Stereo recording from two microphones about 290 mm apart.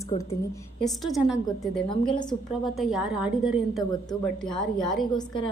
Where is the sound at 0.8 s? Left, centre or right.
Centre.